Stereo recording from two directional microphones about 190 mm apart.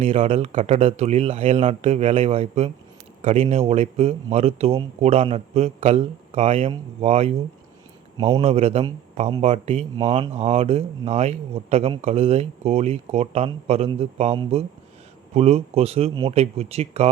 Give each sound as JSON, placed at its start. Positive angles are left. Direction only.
{"t": 0.0, "sound": "a man's voice", "side_deg": -35}